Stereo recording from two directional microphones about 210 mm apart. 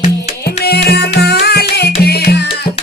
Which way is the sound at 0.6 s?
50° left (ahead or behind).